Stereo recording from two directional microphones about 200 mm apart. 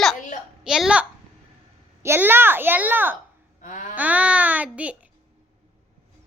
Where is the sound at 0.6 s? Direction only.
5° right (ahead or behind).